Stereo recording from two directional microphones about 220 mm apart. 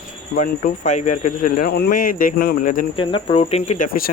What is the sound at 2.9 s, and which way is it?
Speech, 25° left (ahead or behind).